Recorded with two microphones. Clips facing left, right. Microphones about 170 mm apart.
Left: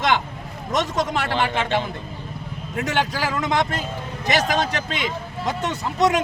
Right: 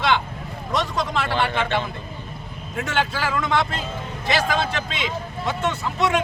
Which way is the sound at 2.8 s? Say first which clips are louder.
Left 1 dB; 40° left (ahead or behind).